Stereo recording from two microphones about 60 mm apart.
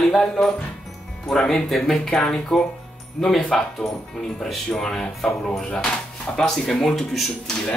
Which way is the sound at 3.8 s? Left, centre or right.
Left.